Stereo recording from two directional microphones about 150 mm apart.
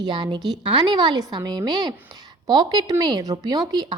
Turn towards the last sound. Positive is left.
turn(degrees=-30)  # may be behind; listen again after turning